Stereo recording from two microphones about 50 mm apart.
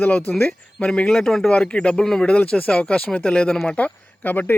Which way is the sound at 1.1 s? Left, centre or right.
Centre.